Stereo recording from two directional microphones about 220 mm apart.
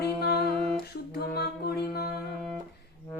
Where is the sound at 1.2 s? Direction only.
45° left (ahead or behind).